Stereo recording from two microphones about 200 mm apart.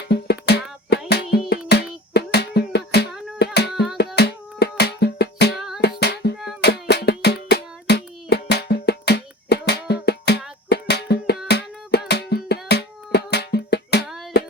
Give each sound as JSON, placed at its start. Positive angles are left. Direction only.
{"t": 0.0, "sound": "music", "side_deg": 55}
{"t": 3.3, "sound": "singing", "side_deg": 55}
{"t": 3.9, "sound": "music", "side_deg": 55}
{"t": 5.5, "sound": "music", "side_deg": 0}
{"t": 5.8, "sound": "music", "side_deg": 55}